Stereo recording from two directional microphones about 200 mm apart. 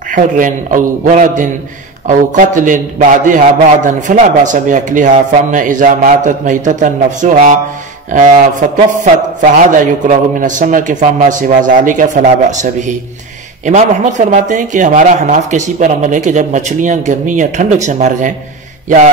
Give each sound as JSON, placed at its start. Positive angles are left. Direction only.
{"t": 0.1, "sound": "a man's voice", "side_deg": -40}